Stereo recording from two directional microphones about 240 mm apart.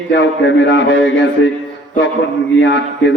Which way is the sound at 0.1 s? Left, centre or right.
Left.